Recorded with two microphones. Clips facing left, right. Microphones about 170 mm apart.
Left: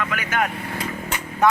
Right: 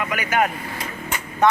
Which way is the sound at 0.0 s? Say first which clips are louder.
Right 3 dB; 10° right (ahead or behind).